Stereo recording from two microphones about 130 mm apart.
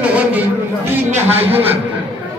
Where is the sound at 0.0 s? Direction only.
10° right (ahead or behind).